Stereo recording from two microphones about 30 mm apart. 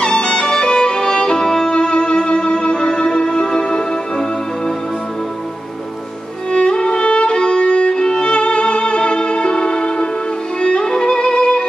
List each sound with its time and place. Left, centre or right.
0.0 s music: left
1.8 s music: left
6.5 s violin: left
8.4 s music: left